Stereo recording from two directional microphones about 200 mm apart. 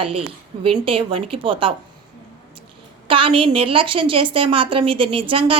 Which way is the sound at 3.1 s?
25° right (ahead or behind).